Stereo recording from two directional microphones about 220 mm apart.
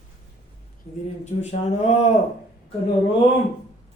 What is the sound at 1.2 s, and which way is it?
Speech, 30° left (ahead or behind).